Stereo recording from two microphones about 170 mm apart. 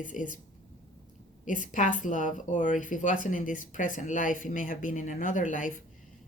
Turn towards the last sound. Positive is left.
turn(degrees=50)  # may be behind; listen again after turning